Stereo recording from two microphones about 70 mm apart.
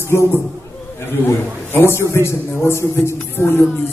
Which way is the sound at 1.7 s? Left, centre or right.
Left.